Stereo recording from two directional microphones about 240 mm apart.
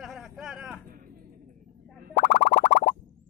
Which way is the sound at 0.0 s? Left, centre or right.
Centre.